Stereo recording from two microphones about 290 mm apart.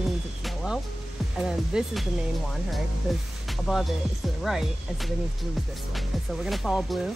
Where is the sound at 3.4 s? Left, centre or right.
Centre.